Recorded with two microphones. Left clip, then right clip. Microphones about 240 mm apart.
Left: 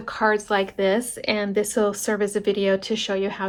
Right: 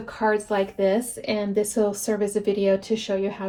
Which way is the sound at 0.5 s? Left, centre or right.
Centre.